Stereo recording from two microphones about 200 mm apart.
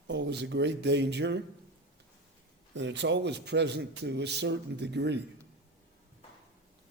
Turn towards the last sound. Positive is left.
turn(degrees=-60)  # may be behind; listen again after turning